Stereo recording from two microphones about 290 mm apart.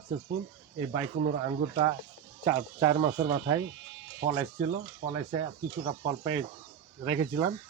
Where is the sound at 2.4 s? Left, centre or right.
Centre.